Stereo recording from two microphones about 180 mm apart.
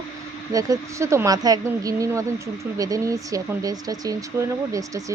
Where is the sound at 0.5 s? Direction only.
20° right (ahead or behind).